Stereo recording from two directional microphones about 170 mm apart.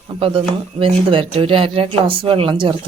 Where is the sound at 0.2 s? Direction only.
30° right (ahead or behind).